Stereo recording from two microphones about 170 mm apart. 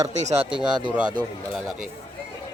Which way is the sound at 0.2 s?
40° right (ahead or behind).